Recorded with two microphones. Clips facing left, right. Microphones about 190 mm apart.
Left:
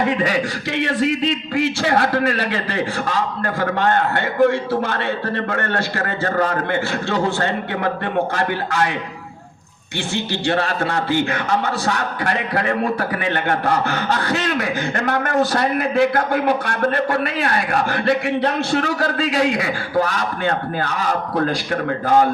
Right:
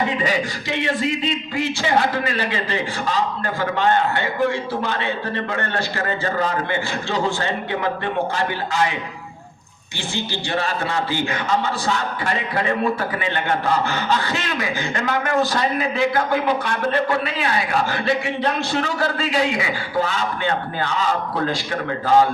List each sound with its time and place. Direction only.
1.5 s a man's voice: 60° left (ahead or behind)
10.4 s a man's voice: 60° left (ahead or behind)
21.8 s a man's voice: 50° left (ahead or behind)